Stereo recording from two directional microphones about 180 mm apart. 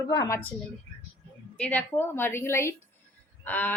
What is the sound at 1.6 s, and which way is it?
A woman's voice, 10° left (ahead or behind).